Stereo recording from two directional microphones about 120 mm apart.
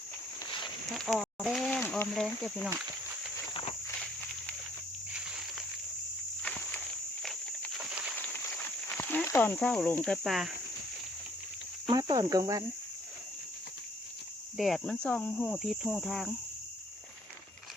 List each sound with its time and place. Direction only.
0.9 s speech: centre (ahead or behind)
2.1 s cricket: 5° left (ahead or behind)
4.0 s a sound: 10° left (ahead or behind)
6.4 s insect: 10° left (ahead or behind)
7.8 s a sound: 10° right (ahead or behind)
8.1 s a sound: 15° left (ahead or behind)
9.2 s cricket: 20° left (ahead or behind)
10.2 s cricket: centre (ahead or behind)
11.9 s cricket: 35° right (ahead or behind)
14.5 s cricket: centre (ahead or behind)
15.0 s cricket: 10° left (ahead or behind)